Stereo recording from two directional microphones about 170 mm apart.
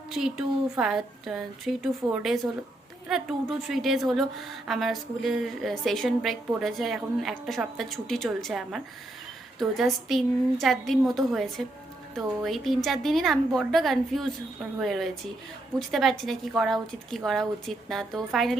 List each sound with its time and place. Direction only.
0.1 s a woman's voice: 5° right (ahead or behind)